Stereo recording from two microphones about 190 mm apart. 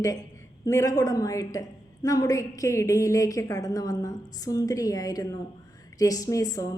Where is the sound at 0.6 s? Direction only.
15° left (ahead or behind).